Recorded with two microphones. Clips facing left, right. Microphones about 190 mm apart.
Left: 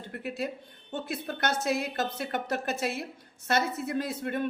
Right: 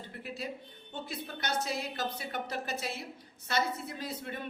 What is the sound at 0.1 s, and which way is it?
A woman's voice, 65° left (ahead or behind).